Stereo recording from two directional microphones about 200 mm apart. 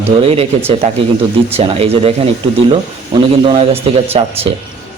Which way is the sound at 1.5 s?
30° right (ahead or behind).